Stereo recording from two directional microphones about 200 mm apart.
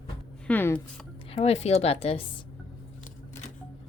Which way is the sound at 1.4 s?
30° left (ahead or behind).